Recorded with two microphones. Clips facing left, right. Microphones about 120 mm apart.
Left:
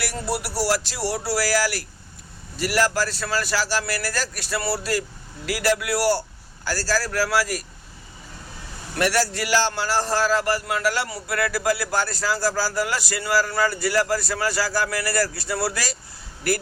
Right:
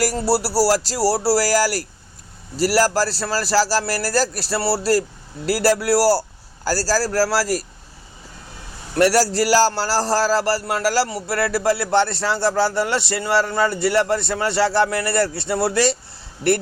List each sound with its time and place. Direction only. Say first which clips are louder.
0.0 s speech: right 8 dB; 35° right (ahead or behind)
9.0 s a man's voice: right 6 dB; 40° right (ahead or behind)